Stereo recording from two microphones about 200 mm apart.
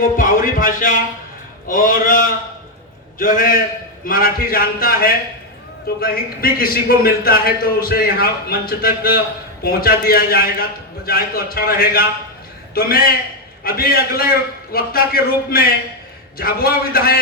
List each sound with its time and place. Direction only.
0.2 s a man's voice: 45° left (ahead or behind)